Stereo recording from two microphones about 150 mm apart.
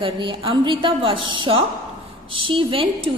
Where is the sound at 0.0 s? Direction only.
35° right (ahead or behind).